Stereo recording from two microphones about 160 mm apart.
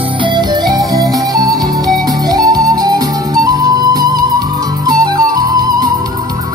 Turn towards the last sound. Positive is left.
turn(degrees=-25)  # may be behind; listen again after turning